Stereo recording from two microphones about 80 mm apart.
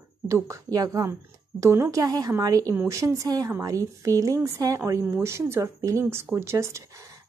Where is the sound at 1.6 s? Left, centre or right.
Right.